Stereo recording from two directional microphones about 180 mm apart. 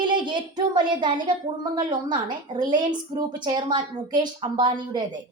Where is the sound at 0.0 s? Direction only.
25° right (ahead or behind).